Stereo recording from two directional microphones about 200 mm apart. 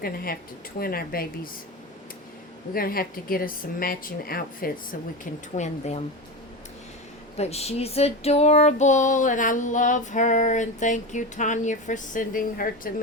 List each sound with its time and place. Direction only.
0.0 s speech: 50° left (ahead or behind)
2.7 s speech: 45° left (ahead or behind)
5.5 s female singing: 35° left (ahead or behind)
7.3 s female singing: 30° left (ahead or behind)